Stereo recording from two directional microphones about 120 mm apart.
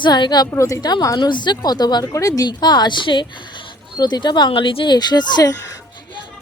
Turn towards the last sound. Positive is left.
turn(degrees=30)  # may be behind; listen again after turning